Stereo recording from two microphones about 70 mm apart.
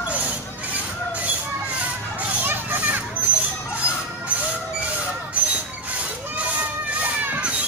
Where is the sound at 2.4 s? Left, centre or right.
Right.